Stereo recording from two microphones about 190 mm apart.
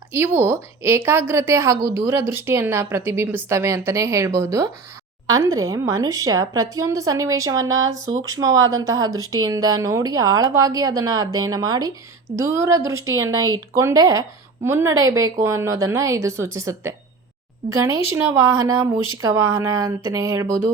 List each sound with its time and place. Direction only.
0.1 s a woman's voice: 10° right (ahead or behind)